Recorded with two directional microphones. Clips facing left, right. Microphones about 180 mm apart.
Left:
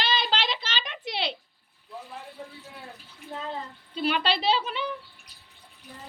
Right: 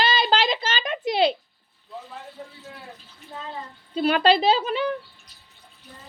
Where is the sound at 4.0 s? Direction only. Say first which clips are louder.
Right 7 dB; 45° right (ahead or behind).